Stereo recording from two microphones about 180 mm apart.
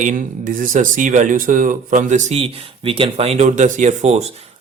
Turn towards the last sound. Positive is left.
turn(degrees=-35)  # may be behind; listen again after turning